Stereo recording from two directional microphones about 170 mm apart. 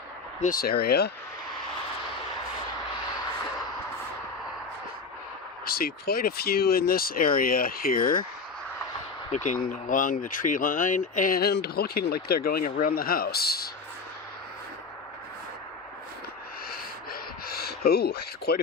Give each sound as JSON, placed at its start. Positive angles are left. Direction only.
{"t": 0.4, "sound": "speech", "side_deg": 60}
{"t": 5.6, "sound": "speech", "side_deg": 60}
{"t": 9.3, "sound": "speech", "side_deg": 45}
{"t": 16.6, "sound": "gasp", "side_deg": 60}